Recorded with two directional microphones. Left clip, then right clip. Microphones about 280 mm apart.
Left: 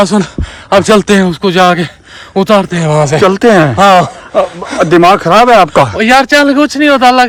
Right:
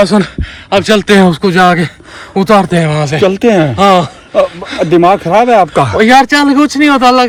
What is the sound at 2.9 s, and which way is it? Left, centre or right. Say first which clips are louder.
Speech: left 5 dB; left.